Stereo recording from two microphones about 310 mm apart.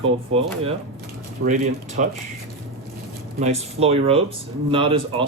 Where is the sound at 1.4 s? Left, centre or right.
Right.